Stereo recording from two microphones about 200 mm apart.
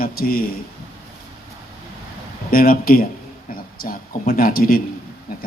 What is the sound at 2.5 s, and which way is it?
Speech, 45° left (ahead or behind).